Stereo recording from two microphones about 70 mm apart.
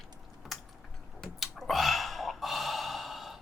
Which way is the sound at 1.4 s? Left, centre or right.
Centre.